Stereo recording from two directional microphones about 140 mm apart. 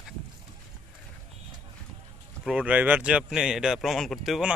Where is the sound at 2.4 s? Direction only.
5° right (ahead or behind).